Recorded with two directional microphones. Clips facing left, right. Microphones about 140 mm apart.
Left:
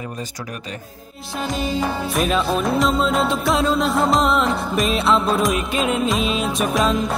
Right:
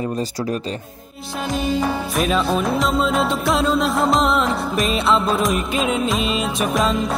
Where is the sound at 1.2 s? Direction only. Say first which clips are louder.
Right 1 dB; centre (ahead or behind).